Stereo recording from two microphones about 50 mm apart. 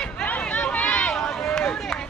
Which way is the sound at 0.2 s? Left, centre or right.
Left.